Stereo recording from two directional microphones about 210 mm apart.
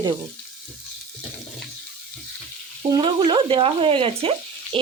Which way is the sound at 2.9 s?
20° right (ahead or behind).